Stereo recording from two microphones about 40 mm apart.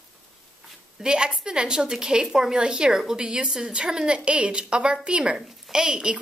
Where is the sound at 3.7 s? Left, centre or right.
Right.